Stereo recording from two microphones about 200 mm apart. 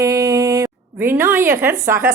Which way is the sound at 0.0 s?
15° right (ahead or behind).